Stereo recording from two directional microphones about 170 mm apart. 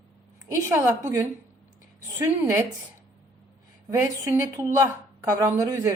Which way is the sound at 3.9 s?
15° right (ahead or behind).